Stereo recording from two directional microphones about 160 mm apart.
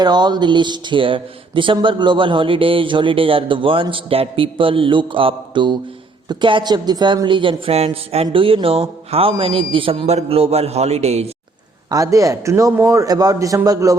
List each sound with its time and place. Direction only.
0.0 s speech: 25° right (ahead or behind); by 11.3 s 40° right (ahead or behind)
11.9 s speech: 20° right (ahead or behind)